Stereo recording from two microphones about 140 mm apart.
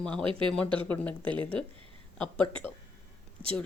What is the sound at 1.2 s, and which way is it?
Speech, 35° right (ahead or behind).